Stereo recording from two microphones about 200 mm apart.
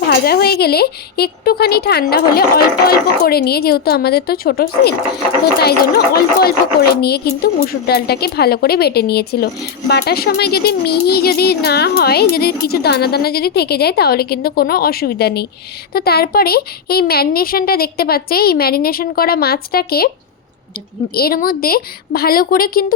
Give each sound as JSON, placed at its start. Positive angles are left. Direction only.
{"t": 0.1, "sound": "a child's voice", "side_deg": 50}
{"t": 21.2, "sound": "a child's voice", "side_deg": 45}